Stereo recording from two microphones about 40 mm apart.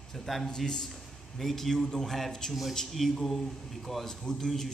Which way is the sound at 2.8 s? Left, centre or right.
Centre.